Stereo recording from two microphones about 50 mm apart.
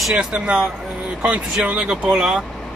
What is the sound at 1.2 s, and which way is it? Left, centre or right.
Speech, right.